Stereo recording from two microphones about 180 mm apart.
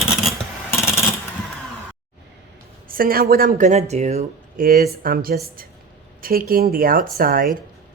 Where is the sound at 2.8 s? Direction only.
55° right (ahead or behind).